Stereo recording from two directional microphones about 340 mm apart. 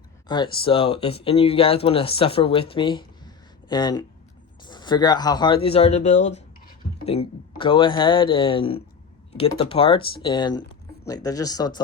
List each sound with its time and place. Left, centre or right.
0.3 s speech: centre